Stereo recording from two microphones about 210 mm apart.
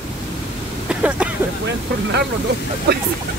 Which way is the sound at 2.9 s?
50° right (ahead or behind).